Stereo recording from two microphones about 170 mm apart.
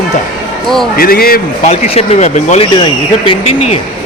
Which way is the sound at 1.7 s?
40° left (ahead or behind).